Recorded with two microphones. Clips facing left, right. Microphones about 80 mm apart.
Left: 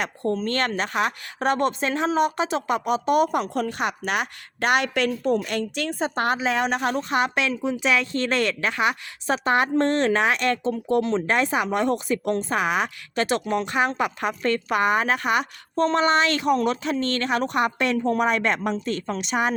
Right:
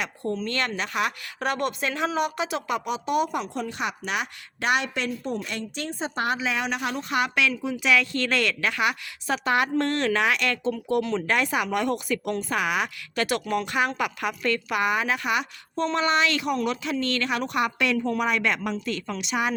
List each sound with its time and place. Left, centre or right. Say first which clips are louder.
0.0 s a woman's voice: left 4 dB; left